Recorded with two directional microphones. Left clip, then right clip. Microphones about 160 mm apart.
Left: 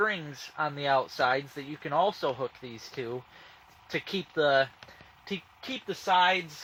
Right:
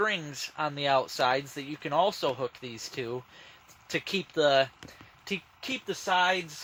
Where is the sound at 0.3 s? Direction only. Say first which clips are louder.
Even; 20° right (ahead or behind).